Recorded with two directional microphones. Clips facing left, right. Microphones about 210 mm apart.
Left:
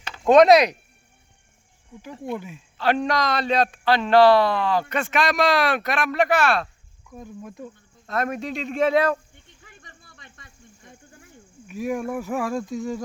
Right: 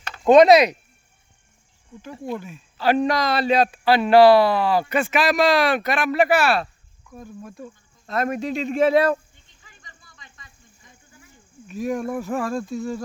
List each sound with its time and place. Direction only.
0.1 s speech: centre (ahead or behind)
2.7 s a man's voice: 5° right (ahead or behind)
7.2 s speech: 15° left (ahead or behind)
8.0 s a man's voice: centre (ahead or behind)
9.3 s snake: 60° left (ahead or behind)
11.7 s speech: 10° left (ahead or behind)